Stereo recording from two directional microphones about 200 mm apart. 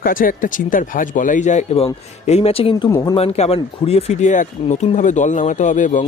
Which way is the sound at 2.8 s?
15° left (ahead or behind).